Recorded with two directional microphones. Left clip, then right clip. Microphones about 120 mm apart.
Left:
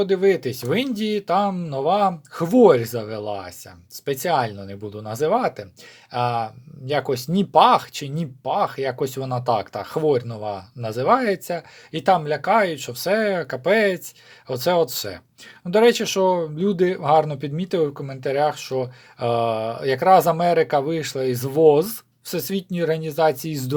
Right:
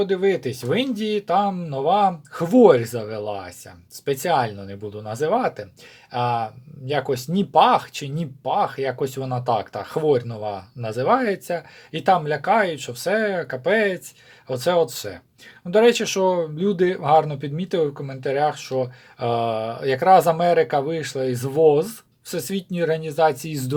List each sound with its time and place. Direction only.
0.0 s speech: 30° left (ahead or behind)
15.7 s speech: 25° left (ahead or behind)